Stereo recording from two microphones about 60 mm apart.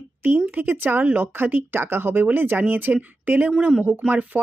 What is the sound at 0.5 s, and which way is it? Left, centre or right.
Speech, right.